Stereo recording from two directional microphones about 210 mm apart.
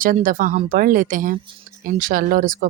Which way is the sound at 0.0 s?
40° right (ahead or behind).